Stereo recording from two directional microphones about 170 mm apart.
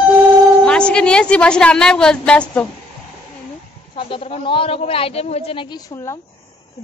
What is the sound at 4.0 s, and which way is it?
A man's voice, 30° left (ahead or behind).